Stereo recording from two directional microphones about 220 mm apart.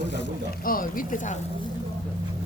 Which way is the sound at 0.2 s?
40° left (ahead or behind).